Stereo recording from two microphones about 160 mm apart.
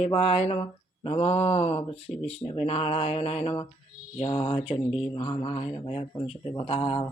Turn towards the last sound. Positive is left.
turn(degrees=35)  # may be behind; listen again after turning